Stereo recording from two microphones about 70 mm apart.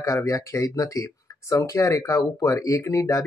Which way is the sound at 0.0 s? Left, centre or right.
Left.